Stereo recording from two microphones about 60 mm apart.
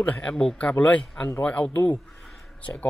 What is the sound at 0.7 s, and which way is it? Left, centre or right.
A man's voice, left.